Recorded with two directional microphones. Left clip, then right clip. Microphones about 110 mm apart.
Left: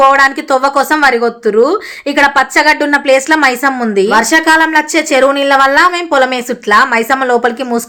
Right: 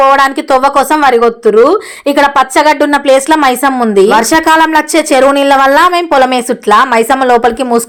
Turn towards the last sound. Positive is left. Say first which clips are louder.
# right 4 dB
turn(degrees=-40)  # may be behind; listen again after turning